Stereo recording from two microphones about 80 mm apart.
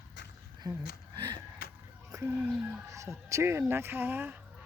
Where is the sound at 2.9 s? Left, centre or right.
Right.